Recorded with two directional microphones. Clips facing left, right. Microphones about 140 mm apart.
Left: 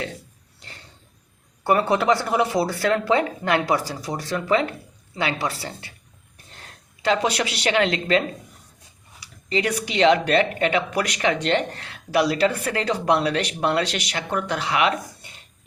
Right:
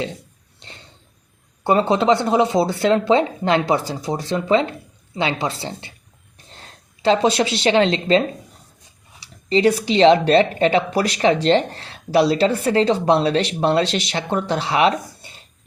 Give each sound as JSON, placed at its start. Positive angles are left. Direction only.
{"t": 1.6, "sound": "speech", "side_deg": -25}
{"t": 7.0, "sound": "speech", "side_deg": -30}
{"t": 9.2, "sound": "speech", "side_deg": -30}